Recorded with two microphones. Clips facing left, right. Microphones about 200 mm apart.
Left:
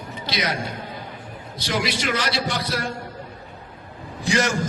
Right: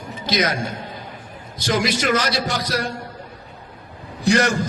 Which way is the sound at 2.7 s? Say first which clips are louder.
Right 3 dB; 75° right (ahead or behind).